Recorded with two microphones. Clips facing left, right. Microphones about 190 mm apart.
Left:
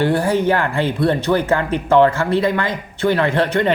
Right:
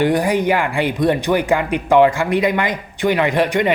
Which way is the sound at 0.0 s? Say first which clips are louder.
Even; 15° right (ahead or behind).